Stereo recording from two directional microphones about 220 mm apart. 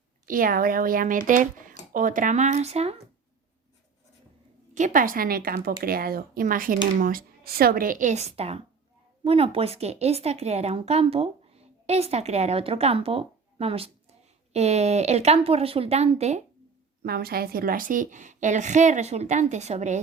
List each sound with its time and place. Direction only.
0.3 s a woman's voice: 40° right (ahead or behind)
4.7 s a woman's voice: 35° right (ahead or behind)
17.0 s a woman's voice: 45° right (ahead or behind)